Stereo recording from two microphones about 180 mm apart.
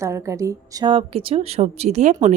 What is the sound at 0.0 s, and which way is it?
A woman's voice, 15° right (ahead or behind).